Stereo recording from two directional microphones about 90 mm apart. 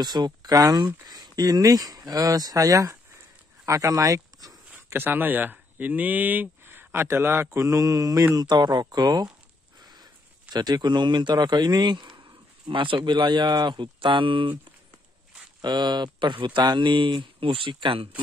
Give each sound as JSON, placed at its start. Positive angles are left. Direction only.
{"t": 0.0, "sound": "speech", "side_deg": -50}
{"t": 4.8, "sound": "speech", "side_deg": -25}
{"t": 7.6, "sound": "mantra", "side_deg": -40}
{"t": 8.4, "sound": "speech", "side_deg": -50}
{"t": 9.8, "sound": "a sound", "side_deg": -50}
{"t": 10.5, "sound": "a man's voice", "side_deg": -50}
{"t": 15.6, "sound": "a man's voice", "side_deg": -55}